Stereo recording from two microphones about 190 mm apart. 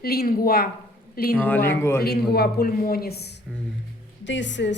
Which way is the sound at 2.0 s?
55° left (ahead or behind).